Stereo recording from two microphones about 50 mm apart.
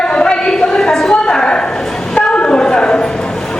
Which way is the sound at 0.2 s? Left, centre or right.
Centre.